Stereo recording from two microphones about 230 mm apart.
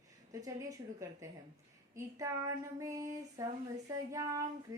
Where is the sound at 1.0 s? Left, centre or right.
Centre.